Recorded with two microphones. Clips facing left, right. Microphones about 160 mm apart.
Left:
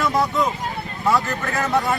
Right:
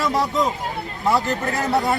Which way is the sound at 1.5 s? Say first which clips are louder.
Left 1 dB; 40° right (ahead or behind).